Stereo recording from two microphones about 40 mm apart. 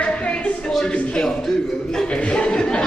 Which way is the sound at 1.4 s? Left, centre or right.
Centre.